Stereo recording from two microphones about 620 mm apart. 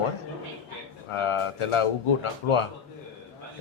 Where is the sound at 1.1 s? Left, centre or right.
Left.